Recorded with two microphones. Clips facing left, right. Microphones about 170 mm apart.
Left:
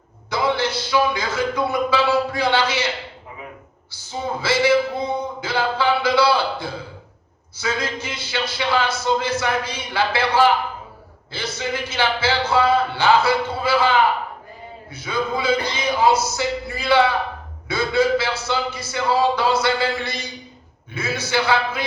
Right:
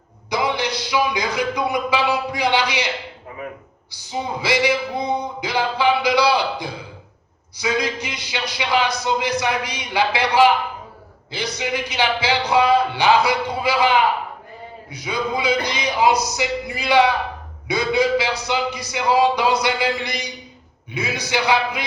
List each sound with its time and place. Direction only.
0.3 s a man's voice: 15° right (ahead or behind)
3.9 s a man's voice: 15° right (ahead or behind)